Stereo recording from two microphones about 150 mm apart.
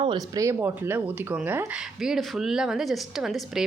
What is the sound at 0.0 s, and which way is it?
Speech, 30° right (ahead or behind).